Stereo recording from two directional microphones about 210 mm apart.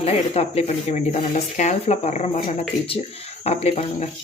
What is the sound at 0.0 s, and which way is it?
Speech, 30° left (ahead or behind).